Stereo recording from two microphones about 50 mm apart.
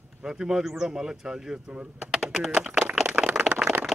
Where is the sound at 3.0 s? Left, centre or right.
Right.